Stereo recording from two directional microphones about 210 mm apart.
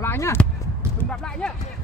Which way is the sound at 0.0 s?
10° left (ahead or behind).